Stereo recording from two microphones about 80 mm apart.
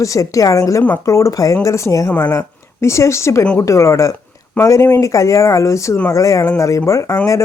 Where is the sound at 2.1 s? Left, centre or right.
Centre.